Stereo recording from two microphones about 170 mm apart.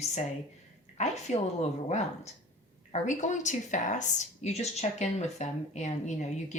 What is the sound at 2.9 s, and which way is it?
Speech, 45° left (ahead or behind).